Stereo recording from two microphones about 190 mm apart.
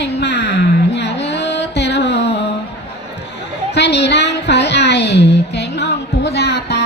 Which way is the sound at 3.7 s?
65° left (ahead or behind).